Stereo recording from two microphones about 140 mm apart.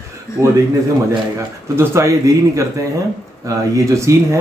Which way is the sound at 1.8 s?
20° right (ahead or behind).